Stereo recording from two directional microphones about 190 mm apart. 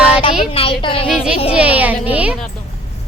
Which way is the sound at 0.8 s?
25° left (ahead or behind).